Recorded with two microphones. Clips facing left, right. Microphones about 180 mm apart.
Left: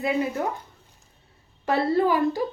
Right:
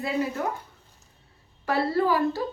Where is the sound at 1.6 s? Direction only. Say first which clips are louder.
Left 2 dB; 20° left (ahead or behind).